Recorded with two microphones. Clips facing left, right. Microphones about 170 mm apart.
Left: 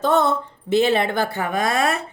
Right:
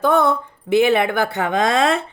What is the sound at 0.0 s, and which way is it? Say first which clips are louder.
Speech: right 2 dB; 55° right (ahead or behind).